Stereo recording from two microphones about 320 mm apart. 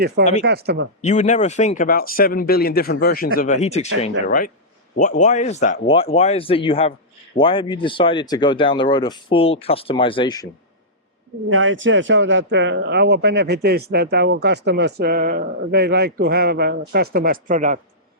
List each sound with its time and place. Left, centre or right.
0.4 s speech: right
1.0 s speech: left
11.4 s speech: right